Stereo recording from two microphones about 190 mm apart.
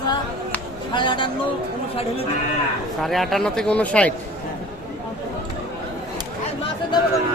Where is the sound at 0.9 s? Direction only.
25° left (ahead or behind).